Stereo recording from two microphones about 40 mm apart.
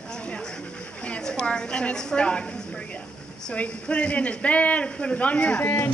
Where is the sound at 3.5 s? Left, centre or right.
Left.